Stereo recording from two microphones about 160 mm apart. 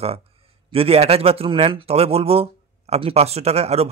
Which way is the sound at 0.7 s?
40° right (ahead or behind).